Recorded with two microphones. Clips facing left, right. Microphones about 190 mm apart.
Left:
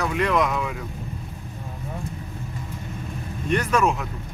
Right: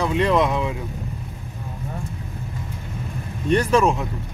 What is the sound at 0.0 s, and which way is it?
Speech, 25° right (ahead or behind).